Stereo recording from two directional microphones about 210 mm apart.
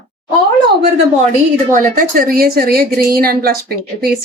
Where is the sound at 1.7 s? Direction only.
45° right (ahead or behind).